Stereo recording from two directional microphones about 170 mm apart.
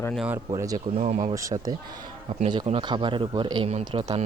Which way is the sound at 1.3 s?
20° right (ahead or behind).